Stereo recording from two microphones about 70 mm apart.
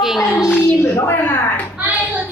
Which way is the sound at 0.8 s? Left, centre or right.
Left.